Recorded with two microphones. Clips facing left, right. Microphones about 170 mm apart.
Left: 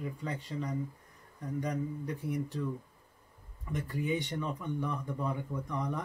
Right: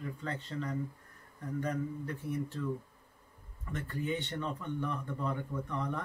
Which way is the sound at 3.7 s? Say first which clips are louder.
Left 2 dB; 15° left (ahead or behind).